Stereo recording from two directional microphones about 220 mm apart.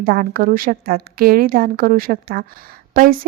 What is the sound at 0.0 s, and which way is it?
A woman's voice, 40° right (ahead or behind).